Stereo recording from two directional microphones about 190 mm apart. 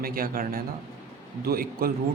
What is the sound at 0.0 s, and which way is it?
Speech, 50° right (ahead or behind).